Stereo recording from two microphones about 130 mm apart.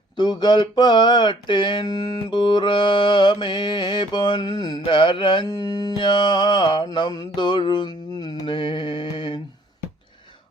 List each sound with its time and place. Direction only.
0.2 s mantra: 35° left (ahead or behind)